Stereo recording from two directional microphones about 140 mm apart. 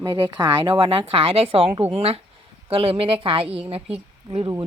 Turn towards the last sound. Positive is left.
turn(degrees=-40)  # may be behind; listen again after turning